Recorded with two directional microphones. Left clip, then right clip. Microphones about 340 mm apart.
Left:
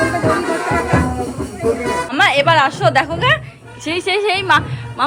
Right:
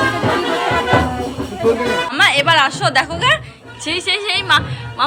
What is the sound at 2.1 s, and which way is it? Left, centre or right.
A woman's voice, centre.